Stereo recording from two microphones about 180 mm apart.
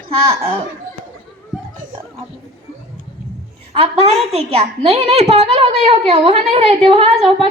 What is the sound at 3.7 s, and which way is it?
A woman's voice, 30° right (ahead or behind).